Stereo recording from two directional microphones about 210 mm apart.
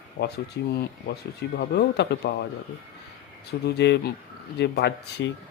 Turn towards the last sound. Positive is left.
turn(degrees=55)  # may be behind; listen again after turning